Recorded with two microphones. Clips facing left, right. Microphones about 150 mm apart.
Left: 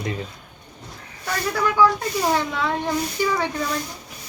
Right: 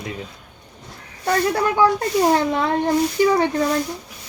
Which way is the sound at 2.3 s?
50° right (ahead or behind).